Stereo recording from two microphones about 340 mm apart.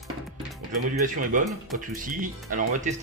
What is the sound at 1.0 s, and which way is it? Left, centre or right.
Speech, right.